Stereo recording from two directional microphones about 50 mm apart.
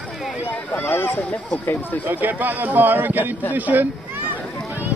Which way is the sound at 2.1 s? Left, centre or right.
Right.